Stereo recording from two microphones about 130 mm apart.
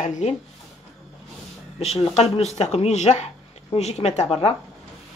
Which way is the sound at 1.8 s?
55° left (ahead or behind).